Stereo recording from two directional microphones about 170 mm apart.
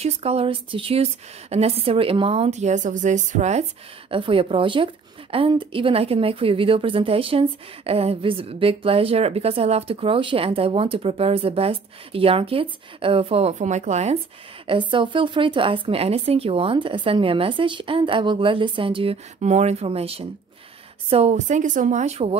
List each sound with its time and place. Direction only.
0.0 s speech: 35° right (ahead or behind)
4.1 s speech: 30° right (ahead or behind)
14.7 s speech: 30° right (ahead or behind)